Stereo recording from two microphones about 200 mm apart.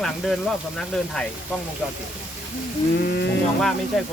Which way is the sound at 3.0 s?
55° left (ahead or behind).